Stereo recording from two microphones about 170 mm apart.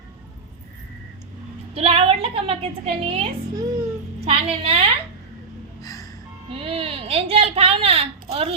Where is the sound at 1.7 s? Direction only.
35° right (ahead or behind).